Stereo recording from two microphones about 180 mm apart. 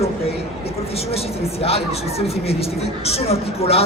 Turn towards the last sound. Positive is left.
turn(degrees=35)  # may be behind; listen again after turning